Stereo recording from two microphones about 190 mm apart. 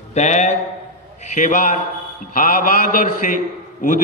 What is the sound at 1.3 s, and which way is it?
A man's voice, 40° left (ahead or behind).